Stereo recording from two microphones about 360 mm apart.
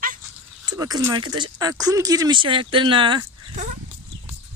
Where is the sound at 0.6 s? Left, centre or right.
Centre.